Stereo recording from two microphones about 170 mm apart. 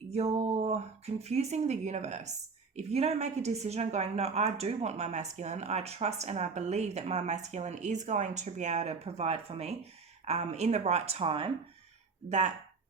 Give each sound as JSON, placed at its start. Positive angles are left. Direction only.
{"t": 0.1, "sound": "a woman's voice", "side_deg": -40}